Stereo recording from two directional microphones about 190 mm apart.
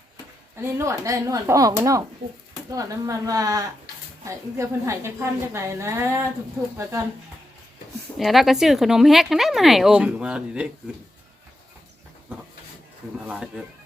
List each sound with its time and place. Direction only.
0.5 s a woman's voice: 15° right (ahead or behind)
8.2 s speech: centre (ahead or behind)
13.2 s speech: 5° right (ahead or behind)